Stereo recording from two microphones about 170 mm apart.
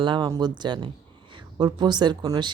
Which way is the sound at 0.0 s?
25° right (ahead or behind).